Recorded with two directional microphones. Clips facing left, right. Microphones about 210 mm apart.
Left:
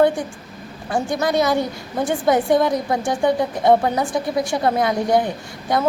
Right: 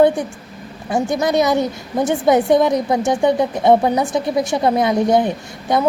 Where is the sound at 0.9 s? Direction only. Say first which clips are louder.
Right 3 dB; 20° right (ahead or behind).